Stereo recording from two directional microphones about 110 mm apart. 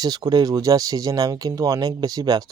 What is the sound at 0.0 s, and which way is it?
Speech, 35° right (ahead or behind).